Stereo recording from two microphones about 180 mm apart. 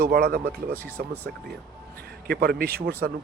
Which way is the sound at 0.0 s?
60° right (ahead or behind).